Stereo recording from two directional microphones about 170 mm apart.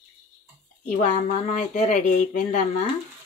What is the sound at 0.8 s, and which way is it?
Speech, 45° left (ahead or behind).